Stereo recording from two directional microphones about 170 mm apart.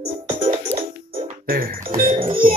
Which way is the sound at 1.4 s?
60° right (ahead or behind).